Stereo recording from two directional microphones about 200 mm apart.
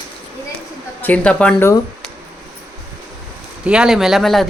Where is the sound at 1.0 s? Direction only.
5° left (ahead or behind).